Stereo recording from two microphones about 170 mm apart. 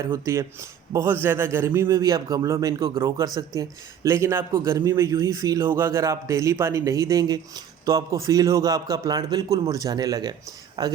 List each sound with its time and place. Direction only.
0.0 s a man's voice: 20° right (ahead or behind)